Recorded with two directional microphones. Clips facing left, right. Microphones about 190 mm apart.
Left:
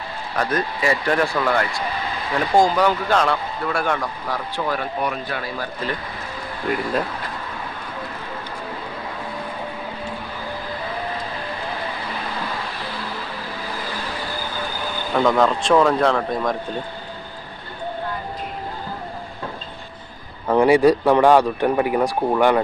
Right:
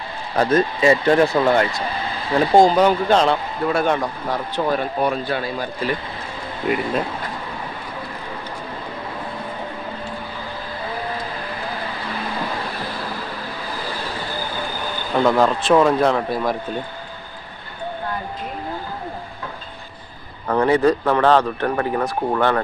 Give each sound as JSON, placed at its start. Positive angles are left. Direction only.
{"t": 0.3, "sound": "speech", "side_deg": -25}
{"t": 6.6, "sound": "a man's voice", "side_deg": -5}
{"t": 15.1, "sound": "a man's voice", "side_deg": -5}
{"t": 20.5, "sound": "speech", "side_deg": 10}